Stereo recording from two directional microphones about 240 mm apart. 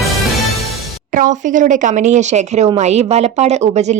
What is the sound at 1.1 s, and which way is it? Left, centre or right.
Speech, right.